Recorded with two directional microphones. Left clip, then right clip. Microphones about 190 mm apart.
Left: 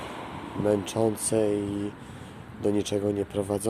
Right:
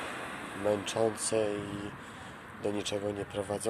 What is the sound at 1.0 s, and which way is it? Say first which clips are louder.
Speech: left 2 dB; 10° left (ahead or behind).